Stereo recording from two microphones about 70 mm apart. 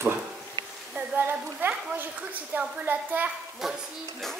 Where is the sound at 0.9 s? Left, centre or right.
Right.